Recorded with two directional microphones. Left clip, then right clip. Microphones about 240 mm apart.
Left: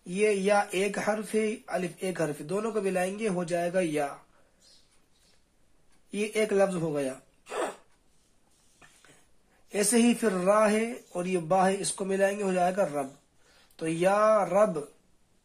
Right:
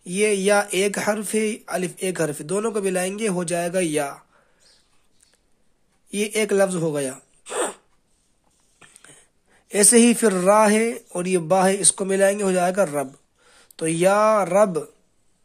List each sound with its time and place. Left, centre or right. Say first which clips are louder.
0.0 s speech: right 6 dB; right
6.0 s speech: right 6 dB; right
8.8 s a sound: right 6 dB; right
9.7 s speech: right 9 dB; right